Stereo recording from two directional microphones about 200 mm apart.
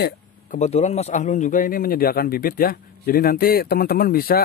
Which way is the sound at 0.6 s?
35° left (ahead or behind).